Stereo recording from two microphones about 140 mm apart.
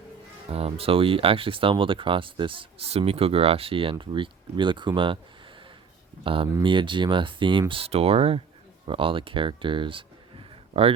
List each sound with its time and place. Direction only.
0.5 s speech: 45° right (ahead or behind)
6.2 s speech: 40° right (ahead or behind)